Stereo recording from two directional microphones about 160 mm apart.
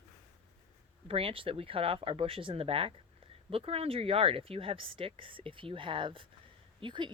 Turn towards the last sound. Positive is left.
turn(degrees=-30)  # may be behind; listen again after turning